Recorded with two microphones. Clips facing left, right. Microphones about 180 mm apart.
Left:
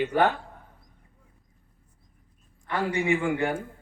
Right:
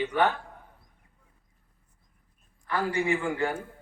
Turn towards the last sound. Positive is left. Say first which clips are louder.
# left 3 dB
turn(degrees=20)  # may be behind; listen again after turning